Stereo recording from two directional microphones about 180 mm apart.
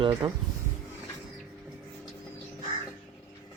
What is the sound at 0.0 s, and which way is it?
Speech, 25° right (ahead or behind).